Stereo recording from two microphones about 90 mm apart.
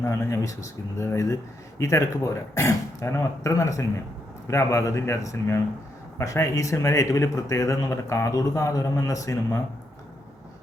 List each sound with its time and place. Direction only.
0.0 s speech: 30° left (ahead or behind)